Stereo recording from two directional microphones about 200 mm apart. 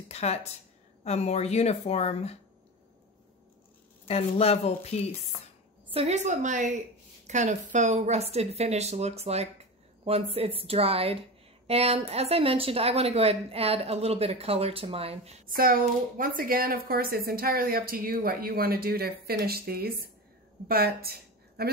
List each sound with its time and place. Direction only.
0.1 s speech: 30° left (ahead or behind)
4.1 s speech: 30° left (ahead or behind)
5.9 s a woman's voice: 35° right (ahead or behind)
15.4 s a woman's voice: 45° right (ahead or behind)